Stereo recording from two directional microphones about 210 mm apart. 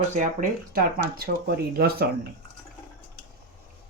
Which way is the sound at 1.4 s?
50° right (ahead or behind).